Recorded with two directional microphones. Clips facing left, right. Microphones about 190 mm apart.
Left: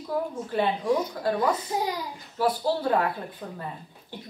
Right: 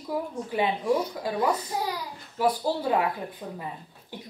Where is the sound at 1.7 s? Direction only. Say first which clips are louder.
Left 2 dB; 15° left (ahead or behind).